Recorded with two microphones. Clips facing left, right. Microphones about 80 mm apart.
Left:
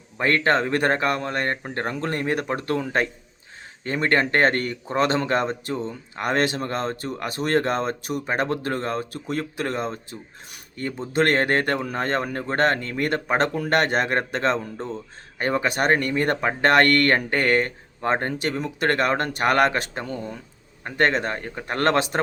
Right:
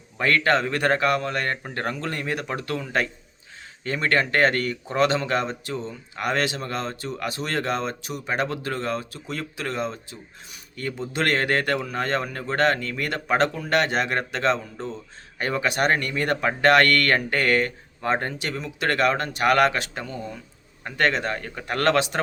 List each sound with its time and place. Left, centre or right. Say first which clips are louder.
0.2 s speech: left 1 dB; left